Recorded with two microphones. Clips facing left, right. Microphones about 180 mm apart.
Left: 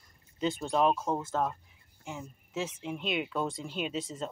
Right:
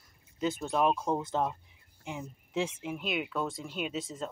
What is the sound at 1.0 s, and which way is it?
Speech, 15° right (ahead or behind).